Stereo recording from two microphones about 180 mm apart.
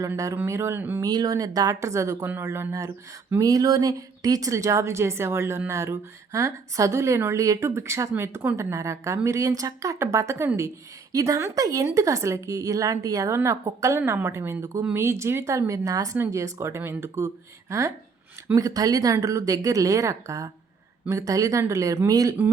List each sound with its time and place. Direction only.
0.0 s speech: 15° right (ahead or behind)